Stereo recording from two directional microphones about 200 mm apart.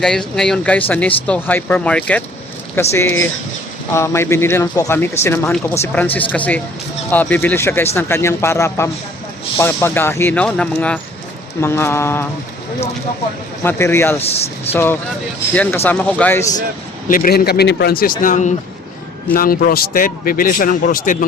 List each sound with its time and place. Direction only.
0.0 s speech: 5° left (ahead or behind)
13.7 s speech: 10° left (ahead or behind)
14.2 s speech: 30° left (ahead or behind)
14.7 s speech: 10° left (ahead or behind)
17.1 s a man's voice: 45° left (ahead or behind)